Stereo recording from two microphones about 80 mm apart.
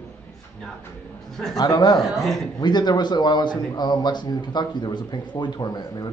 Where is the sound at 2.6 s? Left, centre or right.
Left.